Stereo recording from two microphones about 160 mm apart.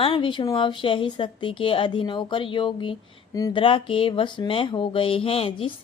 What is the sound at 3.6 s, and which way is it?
Speech, 35° left (ahead or behind).